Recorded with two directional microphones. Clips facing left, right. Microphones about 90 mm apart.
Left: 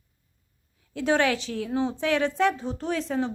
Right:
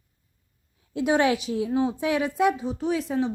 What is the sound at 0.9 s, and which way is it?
A woman's voice, 15° right (ahead or behind).